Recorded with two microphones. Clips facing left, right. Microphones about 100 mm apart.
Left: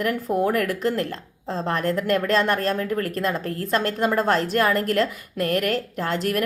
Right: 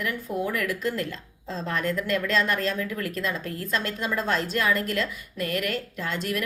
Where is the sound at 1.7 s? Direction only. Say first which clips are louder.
Left 4 dB; 50° left (ahead or behind).